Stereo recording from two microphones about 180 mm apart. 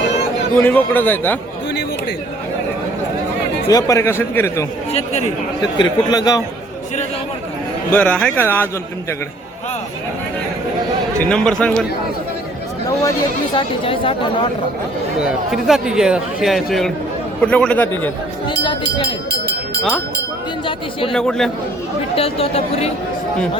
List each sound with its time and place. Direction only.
0.5 s speech: 10° left (ahead or behind)
3.7 s speech: 20° left (ahead or behind)
4.9 s speech: 35° left (ahead or behind)
5.7 s speech: 25° left (ahead or behind)
7.9 s speech: 10° left (ahead or behind)
11.3 s a man's voice: 5° left (ahead or behind)
13.0 s speech: 20° left (ahead or behind)
15.2 s a man's voice: 5° right (ahead or behind)
18.4 s speech: 25° left (ahead or behind)
19.3 s a sound: 60° right (ahead or behind)
21.1 s a man's voice: 5° left (ahead or behind)
22.1 s speech: 30° left (ahead or behind)